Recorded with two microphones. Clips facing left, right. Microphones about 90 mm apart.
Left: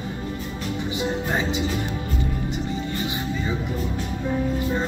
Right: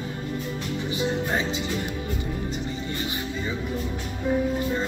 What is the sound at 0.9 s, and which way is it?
Music, 20° left (ahead or behind).